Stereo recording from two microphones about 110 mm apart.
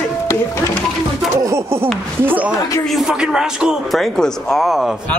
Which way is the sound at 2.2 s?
15° right (ahead or behind).